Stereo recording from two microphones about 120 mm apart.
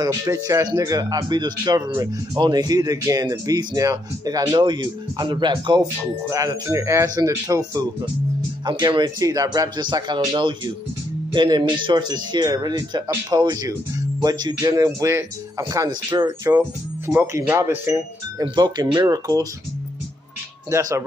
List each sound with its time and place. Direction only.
0.0 s speech: 30° right (ahead or behind)
6.2 s speech: 25° right (ahead or behind)
17.1 s speech: 25° right (ahead or behind)
18.4 s speech: 35° right (ahead or behind)